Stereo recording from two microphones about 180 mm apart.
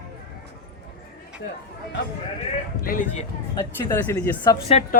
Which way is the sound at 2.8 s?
50° left (ahead or behind).